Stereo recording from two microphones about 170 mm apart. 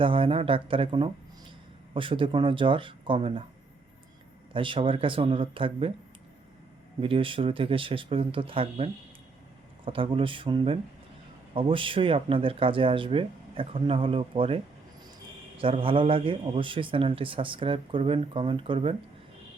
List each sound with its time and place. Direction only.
0.0 s a man's voice: 30° right (ahead or behind)
4.5 s a man's voice: 30° right (ahead or behind)
7.0 s a man's voice: 30° right (ahead or behind)